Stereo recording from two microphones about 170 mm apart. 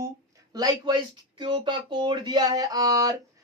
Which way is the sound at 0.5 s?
25° right (ahead or behind).